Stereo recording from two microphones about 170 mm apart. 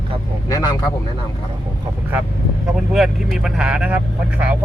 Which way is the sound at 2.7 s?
Centre (ahead or behind).